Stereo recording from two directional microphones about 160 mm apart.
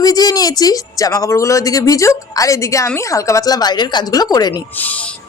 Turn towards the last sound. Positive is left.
turn(degrees=25)  # may be behind; listen again after turning